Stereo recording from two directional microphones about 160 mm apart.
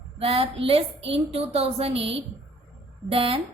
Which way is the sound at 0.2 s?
35° right (ahead or behind).